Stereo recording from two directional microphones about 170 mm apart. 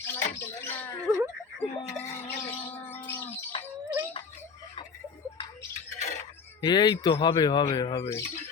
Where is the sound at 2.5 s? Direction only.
10° left (ahead or behind).